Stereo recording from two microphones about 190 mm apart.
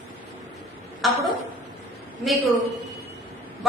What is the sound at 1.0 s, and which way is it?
Speech, centre (ahead or behind).